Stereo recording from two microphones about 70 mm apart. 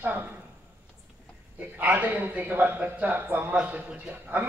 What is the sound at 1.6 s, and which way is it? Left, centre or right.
A man's voice, right.